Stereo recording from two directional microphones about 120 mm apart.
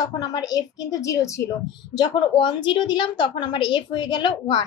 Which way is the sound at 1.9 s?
35° left (ahead or behind).